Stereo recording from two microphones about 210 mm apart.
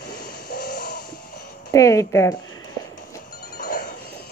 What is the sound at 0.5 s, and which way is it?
Music, 40° left (ahead or behind).